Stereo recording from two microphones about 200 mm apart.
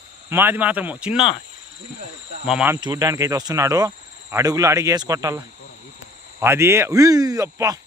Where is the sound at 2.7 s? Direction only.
15° right (ahead or behind).